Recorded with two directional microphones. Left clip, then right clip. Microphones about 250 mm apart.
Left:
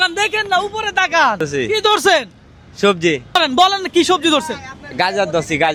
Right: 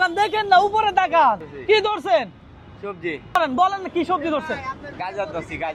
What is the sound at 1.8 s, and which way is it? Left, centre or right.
Speech, left.